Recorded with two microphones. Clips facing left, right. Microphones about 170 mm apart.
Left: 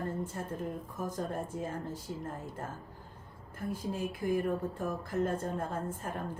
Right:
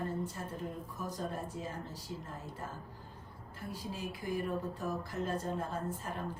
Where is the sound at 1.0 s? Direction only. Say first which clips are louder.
Left 3 dB; 50° left (ahead or behind).